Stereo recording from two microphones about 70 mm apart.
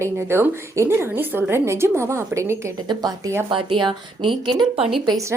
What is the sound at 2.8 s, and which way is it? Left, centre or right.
Speech, right.